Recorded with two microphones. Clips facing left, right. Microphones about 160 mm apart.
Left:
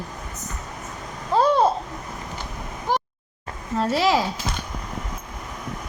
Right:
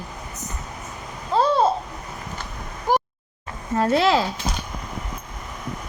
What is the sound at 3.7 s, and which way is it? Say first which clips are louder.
Speech: right 2 dB; 5° left (ahead or behind).